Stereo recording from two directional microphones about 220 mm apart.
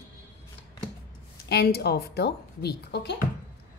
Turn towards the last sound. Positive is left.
turn(degrees=50)  # may be behind; listen again after turning